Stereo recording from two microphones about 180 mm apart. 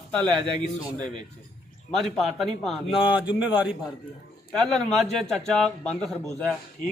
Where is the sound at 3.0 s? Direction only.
25° left (ahead or behind).